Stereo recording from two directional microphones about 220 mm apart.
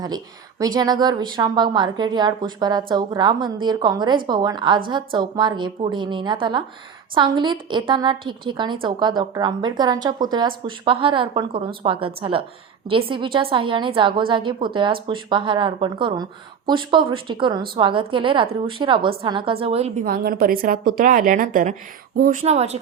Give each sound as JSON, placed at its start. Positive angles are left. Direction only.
{"t": 0.6, "sound": "a woman's voice", "side_deg": -20}
{"t": 20.1, "sound": "a woman's voice", "side_deg": -40}